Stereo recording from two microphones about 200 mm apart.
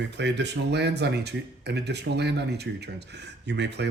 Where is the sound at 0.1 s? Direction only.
60° right (ahead or behind).